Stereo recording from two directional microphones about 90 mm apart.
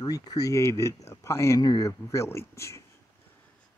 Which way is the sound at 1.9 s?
30° left (ahead or behind).